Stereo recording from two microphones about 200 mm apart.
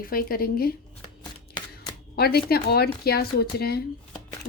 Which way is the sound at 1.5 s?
20° left (ahead or behind).